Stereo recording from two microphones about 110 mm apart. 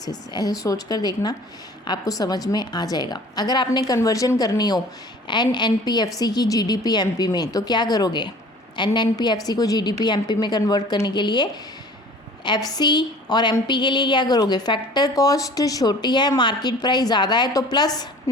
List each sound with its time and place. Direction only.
0.0 s a woman's voice: 35° left (ahead or behind)
12.5 s a woman's voice: 35° left (ahead or behind)